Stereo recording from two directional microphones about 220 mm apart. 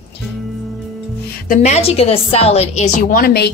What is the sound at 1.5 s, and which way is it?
A woman's voice, 30° left (ahead or behind).